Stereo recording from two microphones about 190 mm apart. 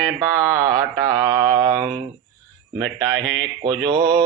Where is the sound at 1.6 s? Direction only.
20° right (ahead or behind).